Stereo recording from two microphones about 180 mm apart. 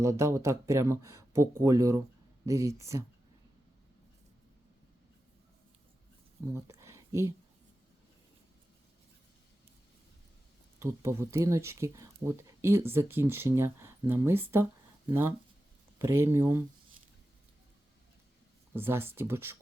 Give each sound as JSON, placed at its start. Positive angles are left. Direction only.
{"t": 0.0, "sound": "speech", "side_deg": -15}
{"t": 6.5, "sound": "speech", "side_deg": -15}
{"t": 10.8, "sound": "speech", "side_deg": -15}
{"t": 18.7, "sound": "speech", "side_deg": -10}